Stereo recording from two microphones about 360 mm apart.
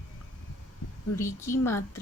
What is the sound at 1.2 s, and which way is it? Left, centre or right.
Speech, centre.